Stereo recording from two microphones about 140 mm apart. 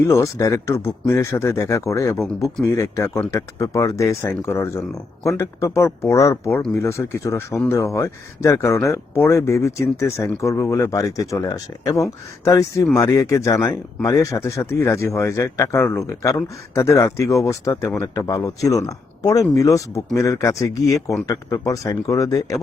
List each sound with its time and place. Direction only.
0.0 s speech: 20° left (ahead or behind)
20.9 s speech: centre (ahead or behind)
21.2 s speech: 25° left (ahead or behind)